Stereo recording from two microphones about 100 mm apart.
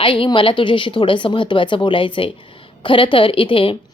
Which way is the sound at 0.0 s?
60° left (ahead or behind).